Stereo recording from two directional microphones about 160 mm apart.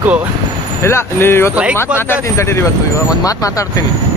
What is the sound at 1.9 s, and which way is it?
Speech, 15° left (ahead or behind).